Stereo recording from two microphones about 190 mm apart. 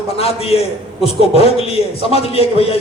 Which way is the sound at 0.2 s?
30° left (ahead or behind).